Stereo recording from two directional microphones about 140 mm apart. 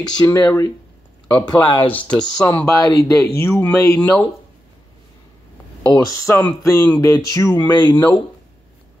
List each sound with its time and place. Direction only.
0.1 s speech: 25° left (ahead or behind)
2.0 s speech: 5° left (ahead or behind)
2.4 s speech: 15° left (ahead or behind)
5.9 s speech: 20° left (ahead or behind)